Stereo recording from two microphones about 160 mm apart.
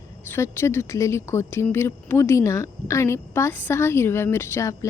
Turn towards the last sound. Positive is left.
turn(degrees=20)  # may be behind; listen again after turning